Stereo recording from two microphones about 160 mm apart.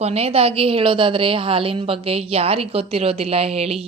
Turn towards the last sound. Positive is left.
turn(degrees=-40)  # may be behind; listen again after turning